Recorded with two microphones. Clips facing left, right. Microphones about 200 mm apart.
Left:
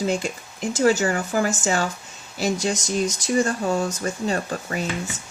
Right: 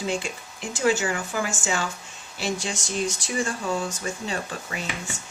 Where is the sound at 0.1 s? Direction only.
40° left (ahead or behind).